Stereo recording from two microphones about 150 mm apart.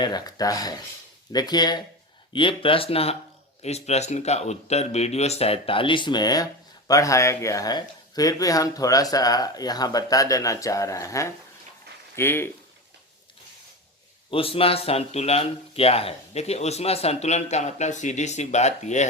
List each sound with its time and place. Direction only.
0.0 s speech: 25° left (ahead or behind)
14.3 s speech: 35° left (ahead or behind)